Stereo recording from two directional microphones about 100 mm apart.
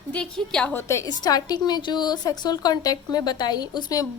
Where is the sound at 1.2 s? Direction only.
40° left (ahead or behind).